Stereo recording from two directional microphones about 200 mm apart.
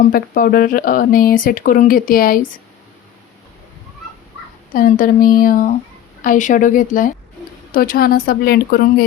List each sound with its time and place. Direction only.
0.0 s speech: 45° left (ahead or behind)
4.7 s speech: 45° left (ahead or behind)